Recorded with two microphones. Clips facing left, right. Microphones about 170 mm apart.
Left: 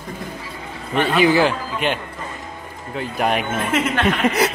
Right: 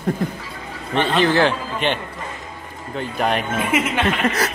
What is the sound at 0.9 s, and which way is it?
A man's voice, 5° left (ahead or behind).